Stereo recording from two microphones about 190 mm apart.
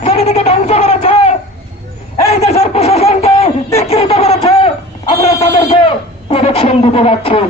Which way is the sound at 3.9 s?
30° left (ahead or behind).